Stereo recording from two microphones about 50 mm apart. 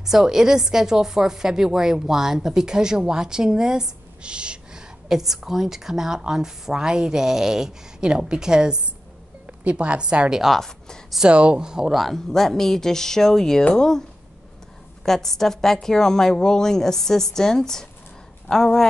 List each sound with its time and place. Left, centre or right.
0.0 s a woman's voice: centre
12.3 s a woman's voice: centre
15.0 s a woman's voice: centre